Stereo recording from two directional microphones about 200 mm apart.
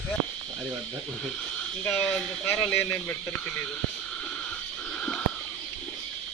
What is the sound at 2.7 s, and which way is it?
Speech, 10° left (ahead or behind).